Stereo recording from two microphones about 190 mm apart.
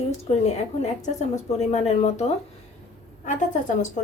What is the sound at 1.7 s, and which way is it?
Speech, 35° left (ahead or behind).